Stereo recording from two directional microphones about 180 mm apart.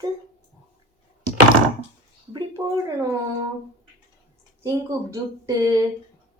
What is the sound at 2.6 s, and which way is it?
Speech, 10° right (ahead or behind).